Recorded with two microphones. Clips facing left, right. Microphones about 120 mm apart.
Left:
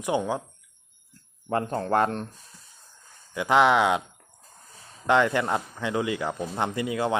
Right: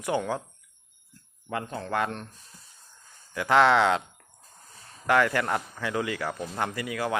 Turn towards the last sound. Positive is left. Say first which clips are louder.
# left 4 dB
turn(degrees=25)  # may be behind; listen again after turning